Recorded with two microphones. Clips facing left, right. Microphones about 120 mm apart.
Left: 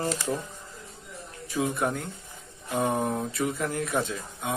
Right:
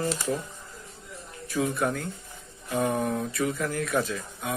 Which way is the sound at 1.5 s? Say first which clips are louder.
Right 1 dB; 20° left (ahead or behind).